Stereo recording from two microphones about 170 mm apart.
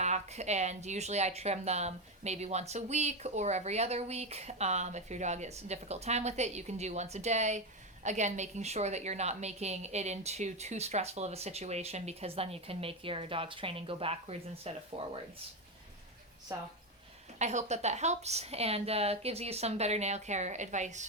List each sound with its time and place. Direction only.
0.0 s speech: 40° right (ahead or behind)
16.5 s a woman's voice: 20° right (ahead or behind)
17.3 s speech: 45° right (ahead or behind)